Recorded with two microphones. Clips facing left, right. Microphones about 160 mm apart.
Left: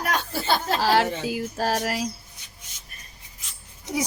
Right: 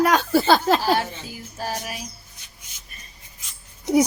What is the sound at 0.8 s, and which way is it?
A woman's voice, 90° left.